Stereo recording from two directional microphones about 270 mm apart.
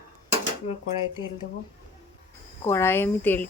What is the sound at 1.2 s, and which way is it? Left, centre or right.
Speech, centre.